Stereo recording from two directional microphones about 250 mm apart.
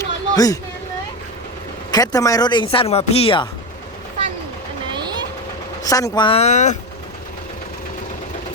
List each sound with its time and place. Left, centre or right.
0.0 s a sound: centre
1.9 s a man's voice: centre
4.9 s vehicle: centre
5.8 s a man's voice: centre